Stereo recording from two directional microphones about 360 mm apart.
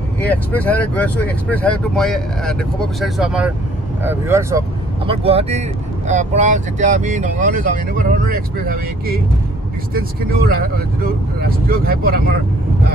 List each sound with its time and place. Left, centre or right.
0.2 s speech: centre; by 9.1 s right
10.5 s speech: right